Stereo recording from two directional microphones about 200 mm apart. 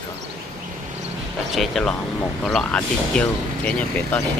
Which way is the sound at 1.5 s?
Centre (ahead or behind).